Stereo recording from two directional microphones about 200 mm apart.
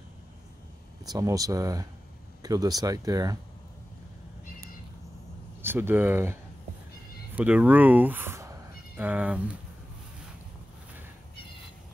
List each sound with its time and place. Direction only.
1.0 s speech: 20° right (ahead or behind)
5.6 s speech: 10° right (ahead or behind)
7.3 s speech: 10° right (ahead or behind)